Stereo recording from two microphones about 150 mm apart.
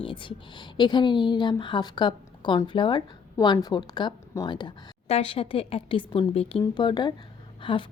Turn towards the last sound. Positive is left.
turn(degrees=30)  # may be behind; listen again after turning